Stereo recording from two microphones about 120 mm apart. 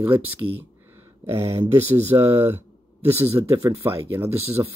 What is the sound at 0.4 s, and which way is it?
Speech, 30° right (ahead or behind).